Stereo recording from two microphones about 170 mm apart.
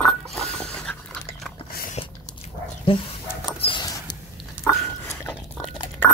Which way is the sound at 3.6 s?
25° left (ahead or behind).